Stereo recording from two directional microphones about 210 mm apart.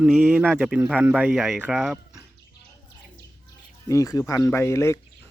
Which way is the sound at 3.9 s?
15° left (ahead or behind).